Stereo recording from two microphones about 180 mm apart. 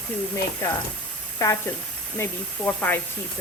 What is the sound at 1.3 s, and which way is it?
Speech, 15° left (ahead or behind).